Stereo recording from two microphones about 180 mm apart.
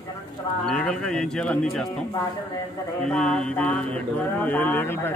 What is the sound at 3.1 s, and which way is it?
Mantra, 5° left (ahead or behind).